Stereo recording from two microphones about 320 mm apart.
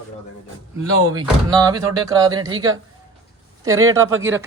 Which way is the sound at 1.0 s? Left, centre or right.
Centre.